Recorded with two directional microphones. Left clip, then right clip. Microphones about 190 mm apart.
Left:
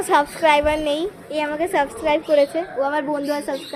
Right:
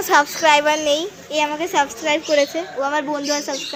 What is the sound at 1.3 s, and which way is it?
Speech, 20° right (ahead or behind).